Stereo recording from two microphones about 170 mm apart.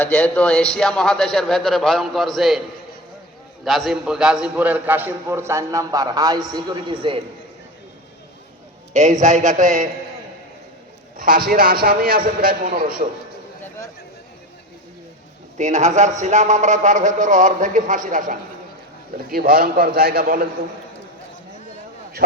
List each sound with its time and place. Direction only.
0.0 s a man's voice: 5° left (ahead or behind)
3.6 s a man's voice: centre (ahead or behind); by 7.2 s 30° right (ahead or behind)
8.9 s speech: 45° right (ahead or behind)
11.4 s a man's voice: 60° right (ahead or behind)
15.5 s a man's voice: 45° right (ahead or behind); by 20.5 s 60° right (ahead or behind)